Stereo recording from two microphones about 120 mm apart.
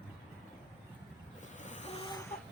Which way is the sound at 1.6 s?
80° left.